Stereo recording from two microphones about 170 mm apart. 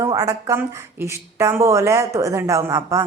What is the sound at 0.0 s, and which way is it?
Speech, 20° right (ahead or behind).